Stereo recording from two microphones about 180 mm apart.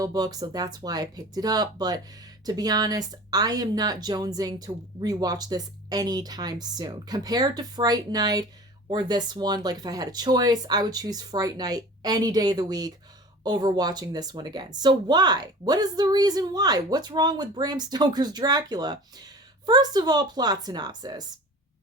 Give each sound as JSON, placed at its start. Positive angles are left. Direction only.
{"t": 0.0, "sound": "speech", "side_deg": -20}